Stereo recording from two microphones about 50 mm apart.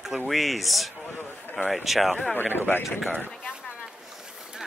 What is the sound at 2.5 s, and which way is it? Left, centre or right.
Speech, left.